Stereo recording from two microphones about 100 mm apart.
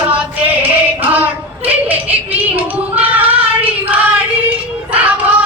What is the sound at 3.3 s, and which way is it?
Child singing, 15° right (ahead or behind).